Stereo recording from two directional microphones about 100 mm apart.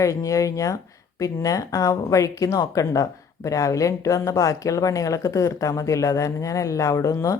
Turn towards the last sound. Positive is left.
turn(degrees=35)  # may be behind; listen again after turning